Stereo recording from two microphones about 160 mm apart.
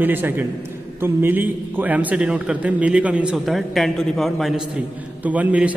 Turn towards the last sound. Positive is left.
turn(degrees=-10)  # may be behind; listen again after turning